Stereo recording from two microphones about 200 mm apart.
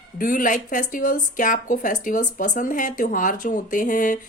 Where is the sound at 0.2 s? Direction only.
40° left (ahead or behind).